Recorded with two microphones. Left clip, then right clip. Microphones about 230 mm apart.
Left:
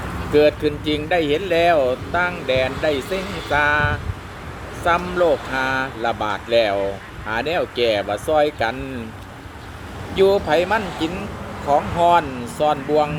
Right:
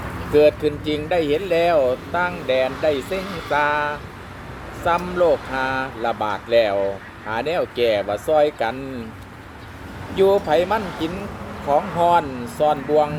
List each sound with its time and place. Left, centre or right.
0.3 s speech: centre
3.2 s speech: left
3.5 s speech: centre
10.2 s speech: centre